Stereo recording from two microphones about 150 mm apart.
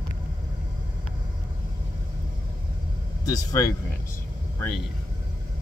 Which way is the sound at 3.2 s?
25° left (ahead or behind).